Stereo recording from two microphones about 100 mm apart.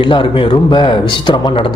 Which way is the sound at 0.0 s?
55° left (ahead or behind).